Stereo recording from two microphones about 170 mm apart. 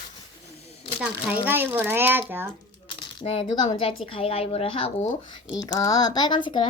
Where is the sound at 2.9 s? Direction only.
30° left (ahead or behind).